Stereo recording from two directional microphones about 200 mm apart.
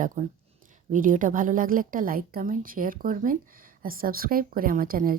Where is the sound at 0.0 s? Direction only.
40° right (ahead or behind).